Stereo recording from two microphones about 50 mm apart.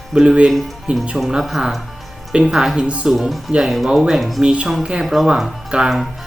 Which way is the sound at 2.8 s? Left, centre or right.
Right.